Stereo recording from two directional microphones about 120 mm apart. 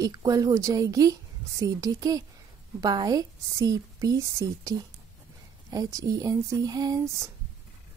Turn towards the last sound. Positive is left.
turn(degrees=-35)  # may be behind; listen again after turning